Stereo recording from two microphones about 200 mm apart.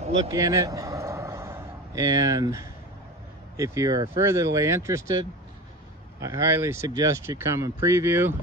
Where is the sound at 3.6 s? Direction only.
15° right (ahead or behind).